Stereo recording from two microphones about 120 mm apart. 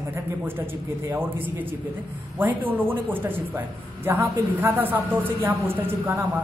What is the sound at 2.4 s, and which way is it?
Speech, 15° right (ahead or behind).